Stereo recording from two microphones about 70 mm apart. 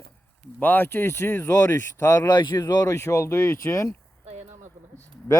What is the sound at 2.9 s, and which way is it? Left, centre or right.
Speech, left.